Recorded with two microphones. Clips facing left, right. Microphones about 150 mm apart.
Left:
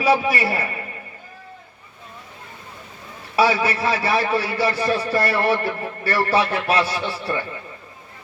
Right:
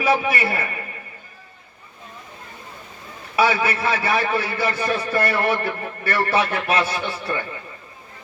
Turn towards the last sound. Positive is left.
turn(degrees=35)  # may be behind; listen again after turning